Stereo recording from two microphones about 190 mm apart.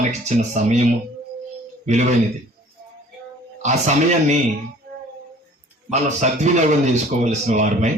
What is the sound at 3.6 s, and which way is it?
Speech, 40° right (ahead or behind).